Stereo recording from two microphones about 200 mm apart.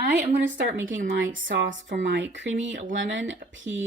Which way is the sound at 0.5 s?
75° right (ahead or behind).